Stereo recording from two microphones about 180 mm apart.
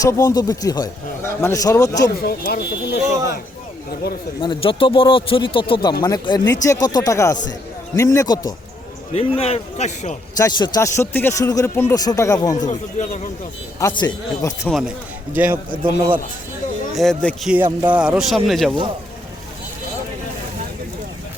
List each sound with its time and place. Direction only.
0.0 s speech: 20° left (ahead or behind)
2.2 s speech: 60° left (ahead or behind)
4.4 s a man's voice: 30° left (ahead or behind)
9.1 s a man's voice: 35° left (ahead or behind)
10.3 s a man's voice: 20° left (ahead or behind)
12.6 s speech: 45° left (ahead or behind)
13.7 s speech: 20° left (ahead or behind)
14.7 s a man's voice: centre (ahead or behind)
15.7 s a man's voice: 30° right (ahead or behind)
16.9 s a man's voice: centre (ahead or behind)